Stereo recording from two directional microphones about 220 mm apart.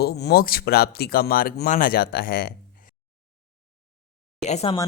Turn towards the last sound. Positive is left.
turn(degrees=25)  # may be behind; listen again after turning